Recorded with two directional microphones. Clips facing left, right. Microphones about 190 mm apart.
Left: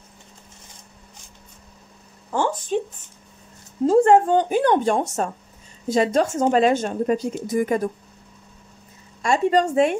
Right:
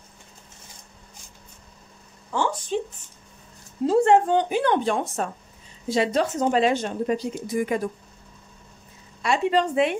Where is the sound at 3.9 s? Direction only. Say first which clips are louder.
Left 3 dB; 45° left (ahead or behind).